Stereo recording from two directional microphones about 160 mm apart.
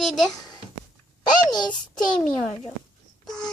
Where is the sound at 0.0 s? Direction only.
Centre (ahead or behind).